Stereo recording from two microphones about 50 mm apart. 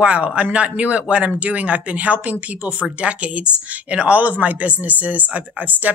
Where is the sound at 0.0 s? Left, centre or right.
Right.